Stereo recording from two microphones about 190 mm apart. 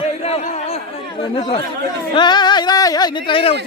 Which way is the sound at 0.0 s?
35° left (ahead or behind).